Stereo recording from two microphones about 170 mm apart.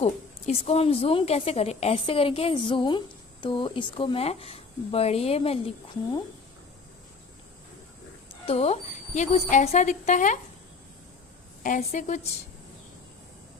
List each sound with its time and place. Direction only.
0.0 s a woman's voice: 40° left (ahead or behind)
8.3 s a woman's voice: 35° left (ahead or behind)
11.6 s a woman's voice: 45° left (ahead or behind)